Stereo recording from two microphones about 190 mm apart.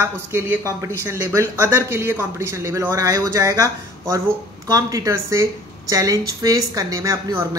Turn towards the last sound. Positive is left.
turn(degrees=-15)  # may be behind; listen again after turning